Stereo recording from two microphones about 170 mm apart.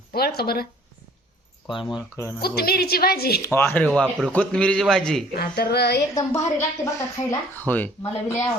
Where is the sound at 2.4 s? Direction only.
65° left (ahead or behind).